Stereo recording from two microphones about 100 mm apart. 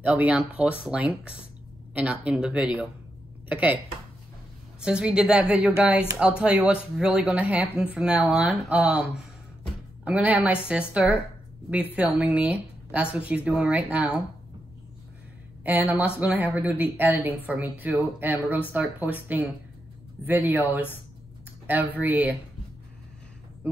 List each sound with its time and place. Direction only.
0.0 s a woman's voice: 15° right (ahead or behind)
15.6 s a woman's voice: 20° right (ahead or behind)